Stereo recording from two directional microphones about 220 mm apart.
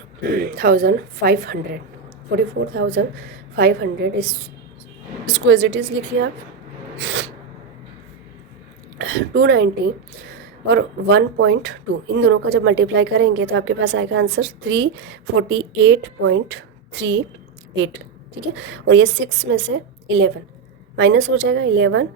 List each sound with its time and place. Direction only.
0.2 s a woman's voice: 45° right (ahead or behind)
9.0 s a woman's voice: 50° right (ahead or behind)
10.7 s a woman's voice: 50° right (ahead or behind)
18.9 s a woman's voice: 55° right (ahead or behind)